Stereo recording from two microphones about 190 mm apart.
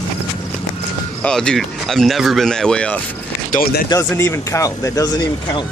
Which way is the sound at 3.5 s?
50° left (ahead or behind).